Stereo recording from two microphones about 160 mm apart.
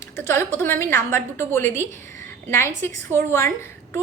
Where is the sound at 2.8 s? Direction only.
15° left (ahead or behind).